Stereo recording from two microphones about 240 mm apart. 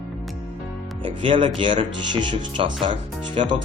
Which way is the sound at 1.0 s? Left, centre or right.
Right.